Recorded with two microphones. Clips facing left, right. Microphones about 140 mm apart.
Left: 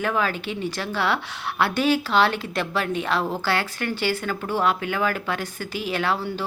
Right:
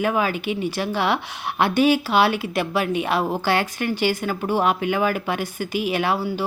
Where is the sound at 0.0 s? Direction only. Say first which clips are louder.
Right 3 dB; 15° right (ahead or behind).